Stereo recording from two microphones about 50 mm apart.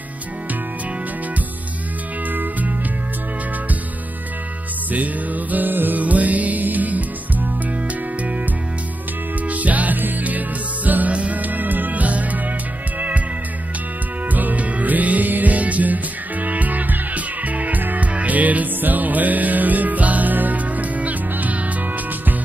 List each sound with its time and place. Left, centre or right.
4.9 s music: right
9.5 s music: right
14.3 s music: right